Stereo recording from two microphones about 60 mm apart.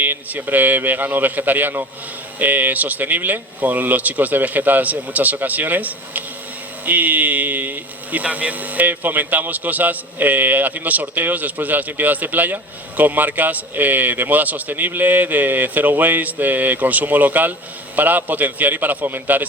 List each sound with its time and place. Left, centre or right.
0.0 s a man's voice: right